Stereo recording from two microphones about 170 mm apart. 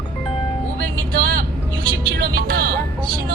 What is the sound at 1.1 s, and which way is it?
Vehicle, 60° right (ahead or behind).